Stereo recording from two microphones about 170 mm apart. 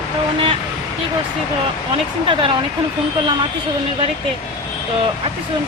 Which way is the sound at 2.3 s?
30° right (ahead or behind).